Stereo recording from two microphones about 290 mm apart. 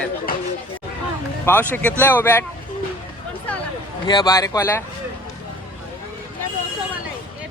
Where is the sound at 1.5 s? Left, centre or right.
Centre.